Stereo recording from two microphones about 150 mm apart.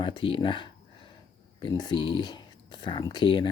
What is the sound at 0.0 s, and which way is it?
Speech, 35° left (ahead or behind).